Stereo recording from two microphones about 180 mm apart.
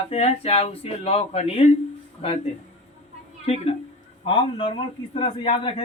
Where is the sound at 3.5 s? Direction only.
35° left (ahead or behind).